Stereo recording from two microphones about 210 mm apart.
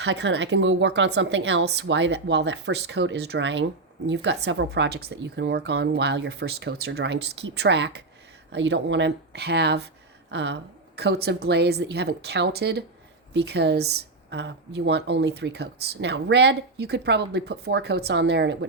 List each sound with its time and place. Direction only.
0.0 s speech: 55° right (ahead or behind)